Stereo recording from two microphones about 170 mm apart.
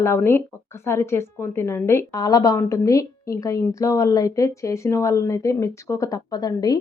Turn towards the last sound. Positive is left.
turn(degrees=20)  # may be behind; listen again after turning